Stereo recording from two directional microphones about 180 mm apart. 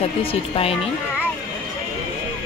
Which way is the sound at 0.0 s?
30° left (ahead or behind).